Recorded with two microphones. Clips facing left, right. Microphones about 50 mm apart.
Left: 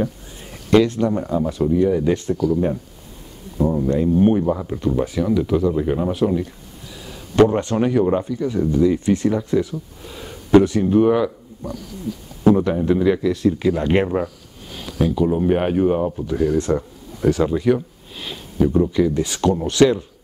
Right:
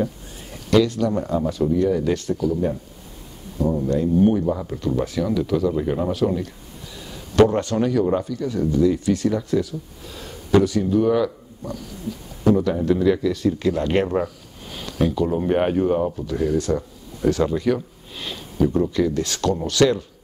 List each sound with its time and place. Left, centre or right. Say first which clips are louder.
0.7 s speech: left 2 dB; left
1.2 s speech: left 1 dB; centre; by 2.3 s left
3.5 s speech: left 2 dB; left
4.5 s speech: left 2 dB; centre
7.3 s speech: left 1 dB; left
10.0 s a sound: left 2 dB; centre
10.5 s speech: left 4 dB; left
11.1 s speech: left 1 dB; centre
12.4 s a man's voice: left 3 dB; left
12.8 s speech: left 1 dB; centre
14.1 s a sound: even; centre
15.3 s speech: left 2 dB; centre